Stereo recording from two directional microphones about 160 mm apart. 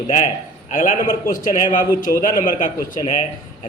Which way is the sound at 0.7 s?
55° left (ahead or behind).